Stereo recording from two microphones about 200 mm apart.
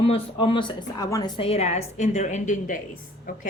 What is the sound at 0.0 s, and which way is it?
A woman's voice, 30° left (ahead or behind).